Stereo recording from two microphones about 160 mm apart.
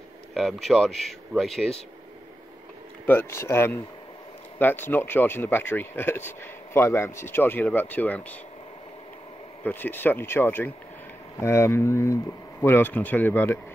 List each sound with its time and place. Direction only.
0.3 s speech: centre (ahead or behind)
3.1 s speech: 15° left (ahead or behind)
9.6 s speech: 10° left (ahead or behind)